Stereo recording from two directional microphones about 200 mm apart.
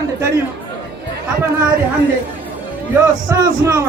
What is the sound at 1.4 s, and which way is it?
Speech, 15° right (ahead or behind).